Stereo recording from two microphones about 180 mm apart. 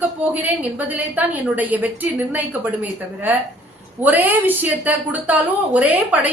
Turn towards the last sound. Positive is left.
turn(degrees=-10)  # may be behind; listen again after turning